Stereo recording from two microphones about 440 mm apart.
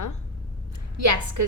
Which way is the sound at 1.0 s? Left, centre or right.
Right.